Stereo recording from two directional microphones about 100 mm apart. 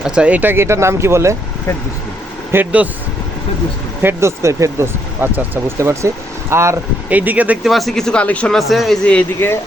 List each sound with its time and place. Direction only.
0.0 s speech: 10° right (ahead or behind); by 1.4 s 30° right (ahead or behind)
2.5 s speech: 20° right (ahead or behind)
4.0 s speech: 30° right (ahead or behind)
7.1 s speech: 15° right (ahead or behind)
7.6 s speech: centre (ahead or behind)
8.5 s speech: centre (ahead or behind)
9.0 s speech: 10° left (ahead or behind)